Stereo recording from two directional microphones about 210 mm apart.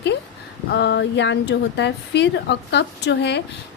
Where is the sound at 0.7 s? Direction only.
55° left (ahead or behind).